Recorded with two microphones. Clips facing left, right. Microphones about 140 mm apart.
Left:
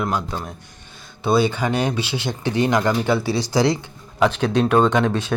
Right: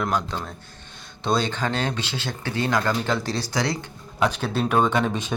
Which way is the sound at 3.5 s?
25° left (ahead or behind).